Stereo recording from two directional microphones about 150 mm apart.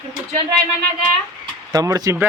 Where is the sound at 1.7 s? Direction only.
25° right (ahead or behind).